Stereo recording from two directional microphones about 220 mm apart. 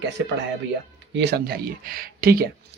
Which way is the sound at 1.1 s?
50° right (ahead or behind).